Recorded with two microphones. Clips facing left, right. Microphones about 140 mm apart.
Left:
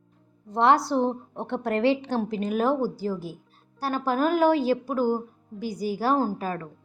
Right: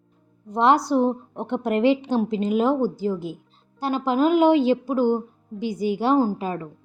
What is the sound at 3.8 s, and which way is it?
Speech, 20° right (ahead or behind).